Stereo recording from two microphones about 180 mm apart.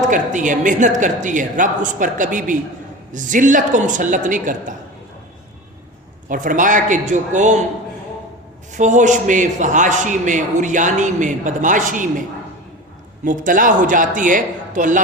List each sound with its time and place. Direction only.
0.1 s a man's voice: 45° right (ahead or behind)
6.2 s a man's voice: 45° right (ahead or behind)
8.7 s a man's voice: 45° right (ahead or behind)
13.2 s a man's voice: 45° right (ahead or behind)